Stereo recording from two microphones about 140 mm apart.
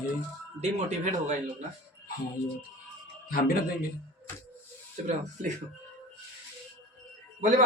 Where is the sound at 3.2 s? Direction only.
90° left.